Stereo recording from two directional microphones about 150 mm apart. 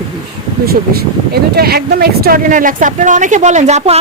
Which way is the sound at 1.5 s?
90° right.